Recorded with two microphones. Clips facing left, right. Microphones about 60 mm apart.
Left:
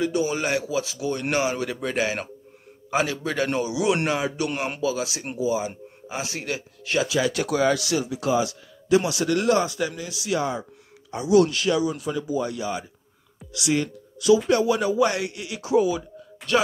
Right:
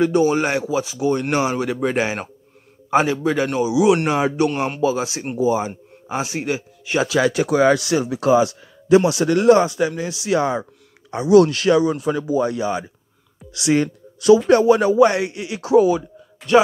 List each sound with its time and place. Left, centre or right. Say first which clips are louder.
0.0 s a man's voice: right 7 dB; right
3.2 s a man's voice: right 5 dB; centre; by 5.7 s right
6.0 s a man's voice: right 7 dB; right
9.9 s speech: right 6 dB; right
11.2 s speech: right 6 dB; right
15.0 s a man's voice: right 7 dB; right
15.6 s speech: right 6 dB; right
16.4 s speech: right 7 dB; centre